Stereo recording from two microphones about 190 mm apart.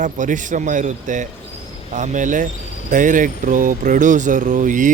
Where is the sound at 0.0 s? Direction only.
40° right (ahead or behind).